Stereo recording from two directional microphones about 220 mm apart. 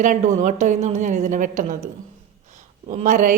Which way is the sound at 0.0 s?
35° right (ahead or behind).